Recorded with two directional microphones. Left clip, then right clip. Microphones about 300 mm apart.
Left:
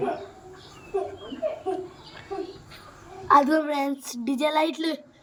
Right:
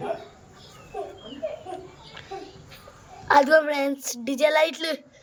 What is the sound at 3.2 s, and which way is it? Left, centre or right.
Speech, centre.